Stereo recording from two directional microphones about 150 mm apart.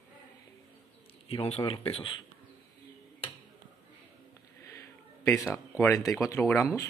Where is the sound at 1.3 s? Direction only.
40° left (ahead or behind).